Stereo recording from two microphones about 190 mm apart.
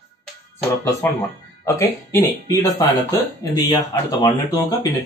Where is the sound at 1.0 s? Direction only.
10° left (ahead or behind).